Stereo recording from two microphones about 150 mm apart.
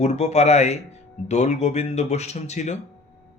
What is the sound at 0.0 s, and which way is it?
Speech, 50° left (ahead or behind).